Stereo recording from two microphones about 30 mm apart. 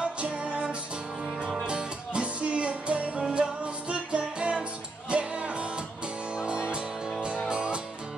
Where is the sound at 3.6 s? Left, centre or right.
Right.